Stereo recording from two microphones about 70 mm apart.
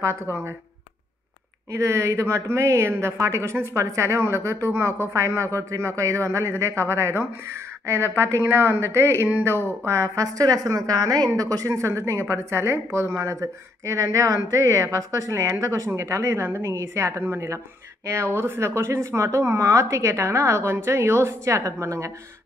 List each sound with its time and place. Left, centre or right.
0.0 s a woman's voice: right
1.7 s a woman's voice: right
9.8 s a woman's voice: right